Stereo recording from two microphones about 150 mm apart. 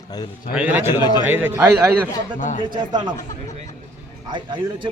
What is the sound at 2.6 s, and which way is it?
Speech, 30° right (ahead or behind).